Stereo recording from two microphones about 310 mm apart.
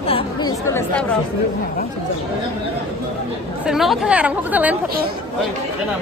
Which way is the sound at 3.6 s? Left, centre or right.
Centre.